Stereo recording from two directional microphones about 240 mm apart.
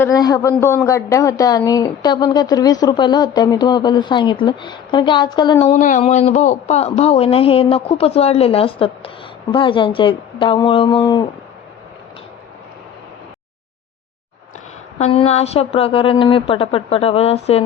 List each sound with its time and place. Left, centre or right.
0.0 s speech: centre
14.9 s speech: left